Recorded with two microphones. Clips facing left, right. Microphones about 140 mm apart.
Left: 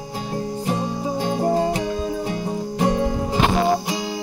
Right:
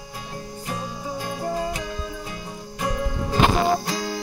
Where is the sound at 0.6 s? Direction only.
30° left (ahead or behind).